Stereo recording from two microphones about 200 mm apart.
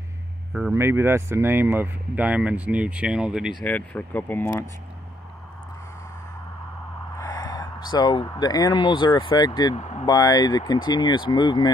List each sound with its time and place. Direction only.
0.7 s speech: 10° right (ahead or behind)
3.6 s speech: 10° left (ahead or behind)
7.2 s speech: 20° left (ahead or behind)
9.8 s speech: 35° left (ahead or behind)
10.0 s speech: 20° left (ahead or behind)